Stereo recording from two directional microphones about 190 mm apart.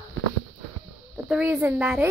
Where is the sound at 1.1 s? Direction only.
5° right (ahead or behind).